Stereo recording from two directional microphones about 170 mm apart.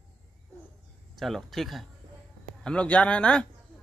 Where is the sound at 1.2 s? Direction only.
Centre (ahead or behind).